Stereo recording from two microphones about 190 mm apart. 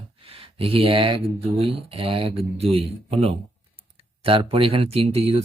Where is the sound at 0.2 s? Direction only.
30° right (ahead or behind).